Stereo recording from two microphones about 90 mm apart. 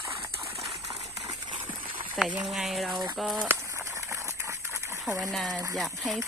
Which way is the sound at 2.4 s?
5° right (ahead or behind).